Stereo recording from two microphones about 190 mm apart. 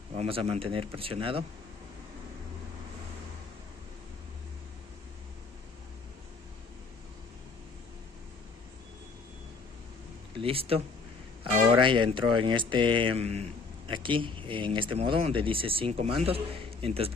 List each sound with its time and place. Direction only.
0.1 s speech: 30° right (ahead or behind)
10.4 s speech: 30° right (ahead or behind)
11.8 s speech: 25° right (ahead or behind)